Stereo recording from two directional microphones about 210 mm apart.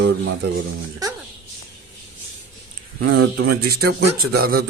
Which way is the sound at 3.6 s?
45° right (ahead or behind).